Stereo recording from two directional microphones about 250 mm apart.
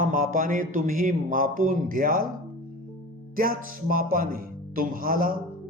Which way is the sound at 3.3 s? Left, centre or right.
Right.